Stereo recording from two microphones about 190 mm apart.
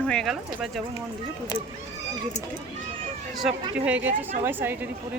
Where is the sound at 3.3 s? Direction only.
5° right (ahead or behind).